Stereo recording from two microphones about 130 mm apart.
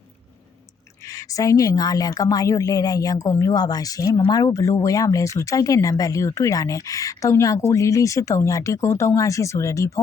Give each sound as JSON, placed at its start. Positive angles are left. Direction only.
{"t": 1.0, "sound": "speech", "side_deg": 25}